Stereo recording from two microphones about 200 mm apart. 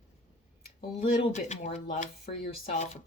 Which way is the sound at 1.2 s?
35° left (ahead or behind).